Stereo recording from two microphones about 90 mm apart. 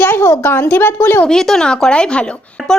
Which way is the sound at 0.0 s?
30° left (ahead or behind).